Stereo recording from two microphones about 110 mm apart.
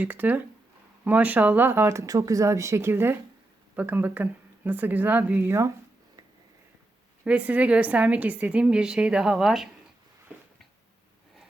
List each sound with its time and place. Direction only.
0.0 s a woman's voice: 15° right (ahead or behind)
7.3 s a woman's voice: 10° right (ahead or behind)